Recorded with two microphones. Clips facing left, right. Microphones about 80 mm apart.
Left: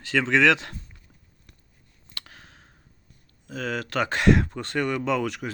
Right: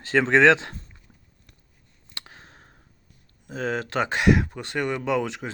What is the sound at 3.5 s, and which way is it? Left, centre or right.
Speech, right.